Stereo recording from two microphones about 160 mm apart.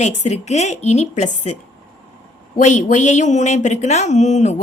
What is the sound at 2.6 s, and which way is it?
Speech, 50° left (ahead or behind).